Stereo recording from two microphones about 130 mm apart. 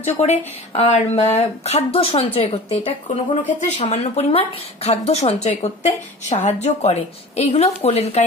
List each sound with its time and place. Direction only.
0.0 s a woman's voice: 55° left (ahead or behind)
3.1 s a woman's voice: 70° left (ahead or behind); by 8.2 s 55° left (ahead or behind)